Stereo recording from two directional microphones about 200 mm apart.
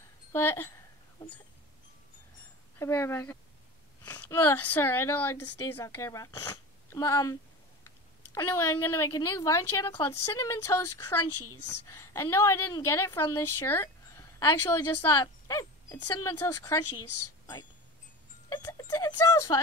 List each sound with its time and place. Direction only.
0.3 s speech: 10° left (ahead or behind)
2.8 s a woman's voice: 10° left (ahead or behind)
8.4 s a woman's voice: 10° left (ahead or behind)
18.5 s speech: 20° left (ahead or behind)